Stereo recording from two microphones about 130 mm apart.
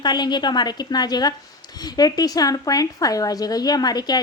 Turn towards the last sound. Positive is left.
turn(degrees=30)  # may be behind; listen again after turning